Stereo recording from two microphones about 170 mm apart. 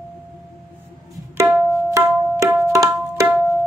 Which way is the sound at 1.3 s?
20° right (ahead or behind).